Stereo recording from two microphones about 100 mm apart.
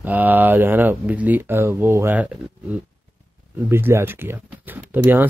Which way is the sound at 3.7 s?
25° right (ahead or behind).